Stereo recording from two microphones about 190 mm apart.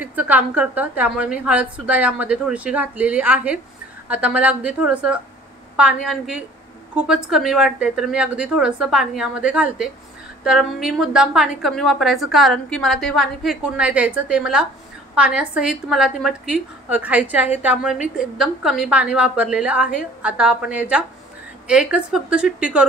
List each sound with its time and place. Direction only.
0.0 s a woman's voice: 10° right (ahead or behind)